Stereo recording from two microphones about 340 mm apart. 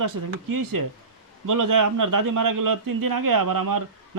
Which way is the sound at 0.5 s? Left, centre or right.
Right.